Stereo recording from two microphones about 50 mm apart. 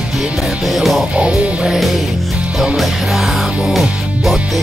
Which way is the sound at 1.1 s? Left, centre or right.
Right.